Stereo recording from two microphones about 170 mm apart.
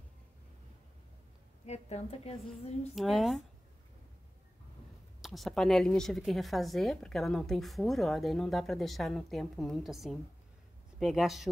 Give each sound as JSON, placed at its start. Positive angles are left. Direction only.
{"t": 1.7, "sound": "a woman's voice", "side_deg": 40}
{"t": 2.9, "sound": "a woman's voice", "side_deg": 0}
{"t": 5.2, "sound": "a woman's voice", "side_deg": 0}